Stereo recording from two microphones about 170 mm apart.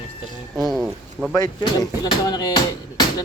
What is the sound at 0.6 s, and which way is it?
Speech, centre (ahead or behind).